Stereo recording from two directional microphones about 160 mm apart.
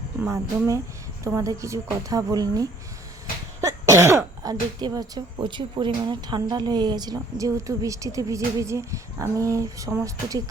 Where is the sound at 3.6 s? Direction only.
20° right (ahead or behind).